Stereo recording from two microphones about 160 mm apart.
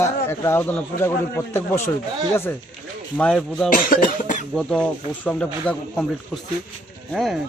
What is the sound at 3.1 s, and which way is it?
Speech, 5° left (ahead or behind).